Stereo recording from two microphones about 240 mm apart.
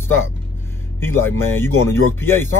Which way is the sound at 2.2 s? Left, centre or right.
Centre.